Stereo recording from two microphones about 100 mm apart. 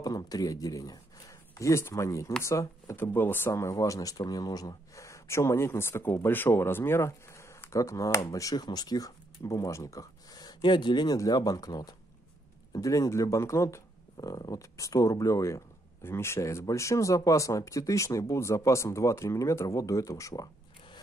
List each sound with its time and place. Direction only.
0.0 s speech: 40° left (ahead or behind)
14.1 s speech: 45° left (ahead or behind)